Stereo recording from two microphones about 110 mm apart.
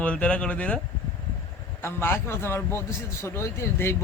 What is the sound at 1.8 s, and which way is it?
A man's voice, 20° left (ahead or behind).